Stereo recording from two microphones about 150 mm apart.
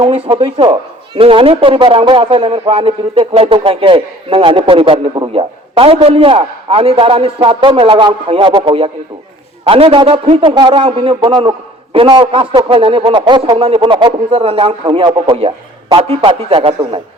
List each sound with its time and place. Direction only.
0.0 s speech: 40° right (ahead or behind)